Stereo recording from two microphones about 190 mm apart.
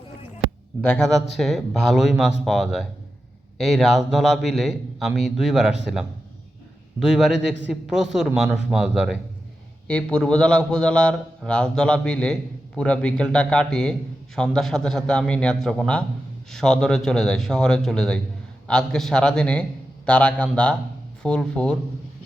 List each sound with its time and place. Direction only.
0.8 s a man's voice: 5° left (ahead or behind)
7.1 s a man's voice: centre (ahead or behind)
7.3 s a man's voice: 70° right (ahead or behind)
7.7 s a man's voice: centre (ahead or behind)